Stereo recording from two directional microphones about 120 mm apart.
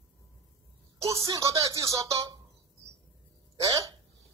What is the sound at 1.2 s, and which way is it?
Speech, 25° right (ahead or behind).